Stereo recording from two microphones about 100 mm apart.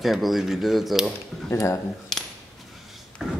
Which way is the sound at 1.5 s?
30° left (ahead or behind).